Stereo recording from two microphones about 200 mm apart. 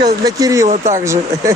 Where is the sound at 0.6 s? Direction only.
35° right (ahead or behind).